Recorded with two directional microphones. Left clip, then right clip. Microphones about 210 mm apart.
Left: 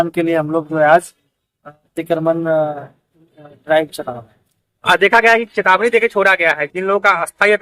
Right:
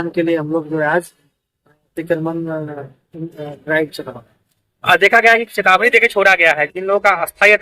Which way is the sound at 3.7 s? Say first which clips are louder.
Left 3 dB; 30° left (ahead or behind).